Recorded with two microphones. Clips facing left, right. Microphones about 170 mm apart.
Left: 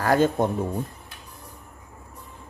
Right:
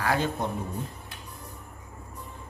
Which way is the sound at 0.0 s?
45° left (ahead or behind).